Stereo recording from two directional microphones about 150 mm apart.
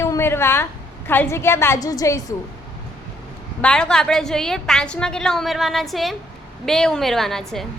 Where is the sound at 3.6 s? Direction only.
5° left (ahead or behind).